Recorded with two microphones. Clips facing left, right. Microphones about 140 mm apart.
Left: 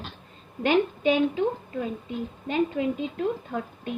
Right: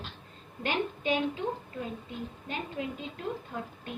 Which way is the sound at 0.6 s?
85° left.